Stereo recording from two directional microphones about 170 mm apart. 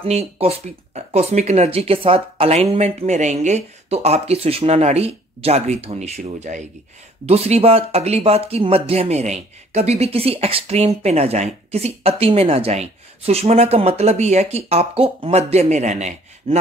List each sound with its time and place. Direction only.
0.0 s speech: 35° right (ahead or behind)